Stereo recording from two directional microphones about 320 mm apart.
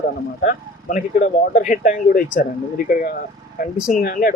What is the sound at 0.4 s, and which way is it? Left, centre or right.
Speech, left.